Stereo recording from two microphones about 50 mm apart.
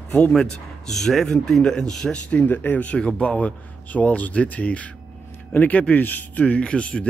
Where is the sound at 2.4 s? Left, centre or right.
Left.